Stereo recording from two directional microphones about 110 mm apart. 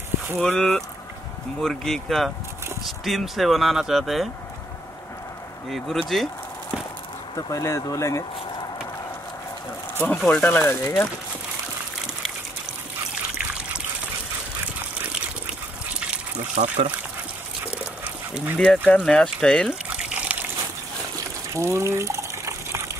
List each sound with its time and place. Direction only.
0.4 s speech: 10° left (ahead or behind)
5.7 s speech: centre (ahead or behind)
7.3 s speech: 30° left (ahead or behind)
10.0 s speech: 15° left (ahead or behind)
13.1 s trickle: 10° right (ahead or behind)
16.5 s speech: 90° right
18.0 s duck: 15° right (ahead or behind)
18.6 s speech: 10° left (ahead or behind)
19.9 s water: 10° right (ahead or behind)
21.5 s water: 25° right (ahead or behind)